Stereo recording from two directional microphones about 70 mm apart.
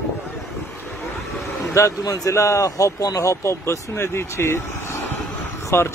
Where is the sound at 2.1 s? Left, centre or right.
Left.